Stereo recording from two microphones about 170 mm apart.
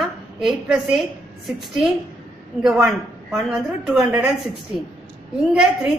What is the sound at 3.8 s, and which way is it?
Speech, 5° right (ahead or behind).